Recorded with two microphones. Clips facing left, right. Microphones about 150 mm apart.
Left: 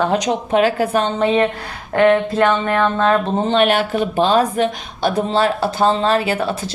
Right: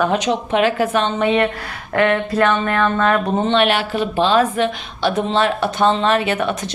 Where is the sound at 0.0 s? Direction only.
30° left (ahead or behind).